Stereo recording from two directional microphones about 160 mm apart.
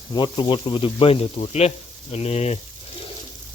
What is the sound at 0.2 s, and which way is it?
Speech, 30° left (ahead or behind).